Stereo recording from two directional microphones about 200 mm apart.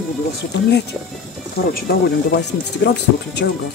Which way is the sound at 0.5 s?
55° left (ahead or behind).